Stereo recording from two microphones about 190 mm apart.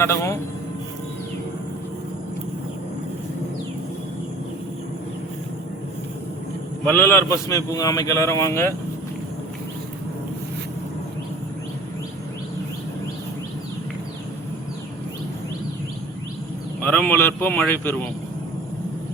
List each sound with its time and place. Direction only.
0.0 s a man's voice: 15° left (ahead or behind)
6.8 s a man's voice: 10° left (ahead or behind)
16.8 s a man's voice: 10° left (ahead or behind)